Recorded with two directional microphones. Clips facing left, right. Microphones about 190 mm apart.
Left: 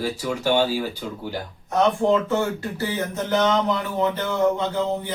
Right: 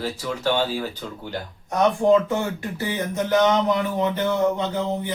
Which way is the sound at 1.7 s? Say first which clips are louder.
Right 1 dB; 15° right (ahead or behind).